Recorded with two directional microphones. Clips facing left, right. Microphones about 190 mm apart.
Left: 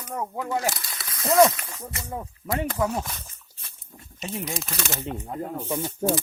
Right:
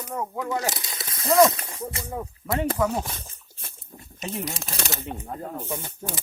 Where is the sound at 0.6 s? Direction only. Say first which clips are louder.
Left 1 dB; 20° right (ahead or behind).